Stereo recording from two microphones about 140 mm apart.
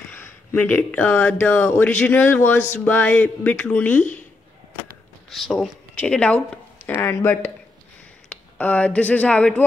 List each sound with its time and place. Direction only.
0.1 s speech: 15° left (ahead or behind)
5.3 s speech: centre (ahead or behind)